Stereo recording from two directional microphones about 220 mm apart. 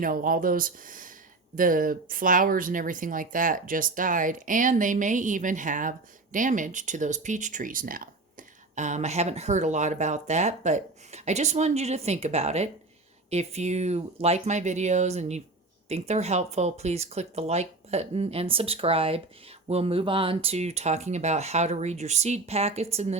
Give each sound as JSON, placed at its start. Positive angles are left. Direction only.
{"t": 0.0, "sound": "speech", "side_deg": -40}